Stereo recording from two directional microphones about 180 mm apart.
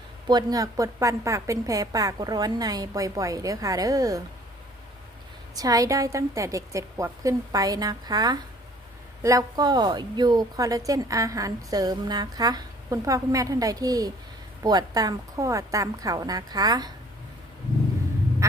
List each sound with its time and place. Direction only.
0.3 s speech: 20° right (ahead or behind)
5.5 s speech: 20° right (ahead or behind)